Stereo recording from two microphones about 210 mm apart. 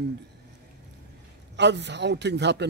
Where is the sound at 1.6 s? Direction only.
55° right (ahead or behind).